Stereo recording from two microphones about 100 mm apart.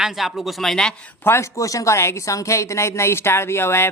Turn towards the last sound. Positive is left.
turn(degrees=25)  # may be behind; listen again after turning